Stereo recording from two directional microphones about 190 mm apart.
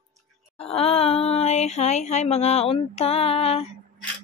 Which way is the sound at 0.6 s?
30° left (ahead or behind).